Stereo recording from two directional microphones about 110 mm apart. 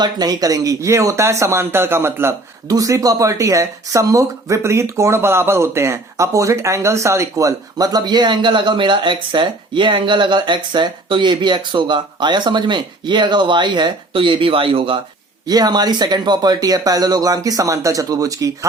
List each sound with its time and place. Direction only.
0.0 s speech: 35° right (ahead or behind); by 14.9 s 55° right (ahead or behind)
15.4 s speech: 40° right (ahead or behind)